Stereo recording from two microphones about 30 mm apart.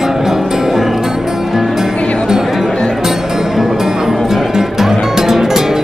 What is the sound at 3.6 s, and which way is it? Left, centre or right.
Music, centre.